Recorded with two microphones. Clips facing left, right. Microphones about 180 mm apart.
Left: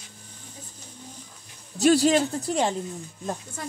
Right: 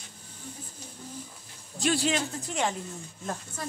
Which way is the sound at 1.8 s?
40° left (ahead or behind).